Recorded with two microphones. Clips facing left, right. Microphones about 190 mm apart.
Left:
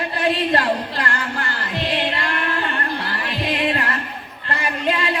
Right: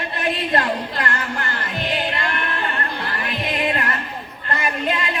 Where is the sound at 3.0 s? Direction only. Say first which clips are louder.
Left 1 dB; 30° left (ahead or behind).